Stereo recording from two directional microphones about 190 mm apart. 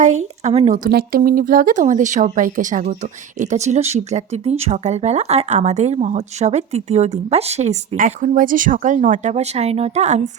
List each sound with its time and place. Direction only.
0.4 s speech: 35° right (ahead or behind)
0.9 s speech: 50° right (ahead or behind); by 10.2 s 35° right (ahead or behind)